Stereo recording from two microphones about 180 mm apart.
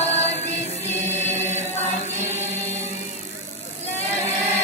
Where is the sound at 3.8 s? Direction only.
40° left (ahead or behind).